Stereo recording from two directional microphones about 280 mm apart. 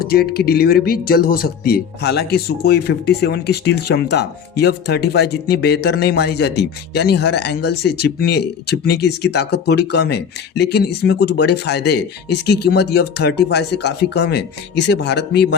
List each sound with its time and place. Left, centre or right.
0.0 s speech: left